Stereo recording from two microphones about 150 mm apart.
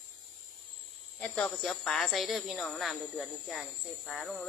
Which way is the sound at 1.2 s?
5° left (ahead or behind).